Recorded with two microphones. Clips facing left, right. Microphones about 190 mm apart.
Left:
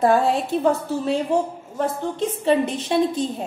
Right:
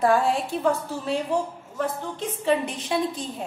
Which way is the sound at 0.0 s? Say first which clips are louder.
Left 3 dB; 20° left (ahead or behind).